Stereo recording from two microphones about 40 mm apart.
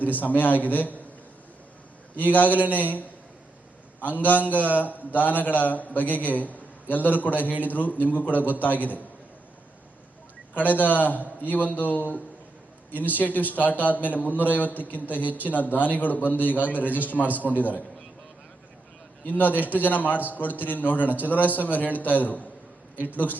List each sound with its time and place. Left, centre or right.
0.0 s a man's voice: left
2.1 s a man's voice: left
4.0 s a man's voice: left
10.5 s a man's voice: left
19.2 s a man's voice: left